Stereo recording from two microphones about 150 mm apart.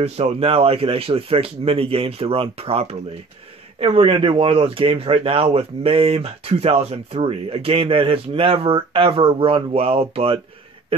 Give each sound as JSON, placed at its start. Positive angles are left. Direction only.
{"t": 0.0, "sound": "speech", "side_deg": -40}